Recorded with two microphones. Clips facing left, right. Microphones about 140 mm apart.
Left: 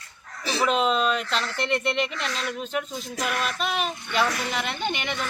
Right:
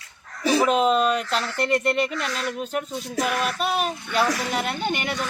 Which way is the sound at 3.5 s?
40° right (ahead or behind).